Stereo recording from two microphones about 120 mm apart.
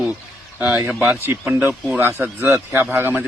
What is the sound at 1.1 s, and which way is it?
A man's voice, 20° right (ahead or behind).